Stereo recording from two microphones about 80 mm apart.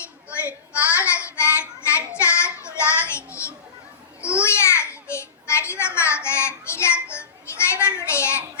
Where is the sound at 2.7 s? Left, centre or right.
Left.